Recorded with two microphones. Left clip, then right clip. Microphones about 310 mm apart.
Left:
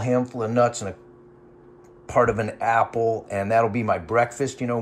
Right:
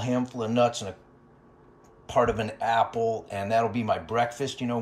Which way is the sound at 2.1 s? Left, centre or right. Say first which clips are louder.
Left 4 dB; centre.